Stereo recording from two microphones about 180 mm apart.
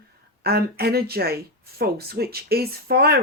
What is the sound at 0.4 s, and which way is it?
Speech, 60° right (ahead or behind).